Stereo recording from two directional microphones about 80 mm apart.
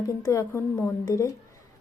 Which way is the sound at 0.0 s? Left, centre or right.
Left.